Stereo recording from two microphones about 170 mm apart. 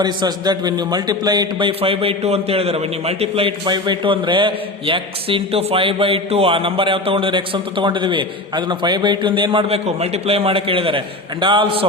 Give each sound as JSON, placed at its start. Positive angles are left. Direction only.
{"t": 0.0, "sound": "speech", "side_deg": -25}